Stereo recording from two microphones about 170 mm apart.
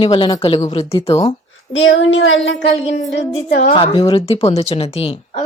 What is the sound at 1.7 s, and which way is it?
Speech, 90° left.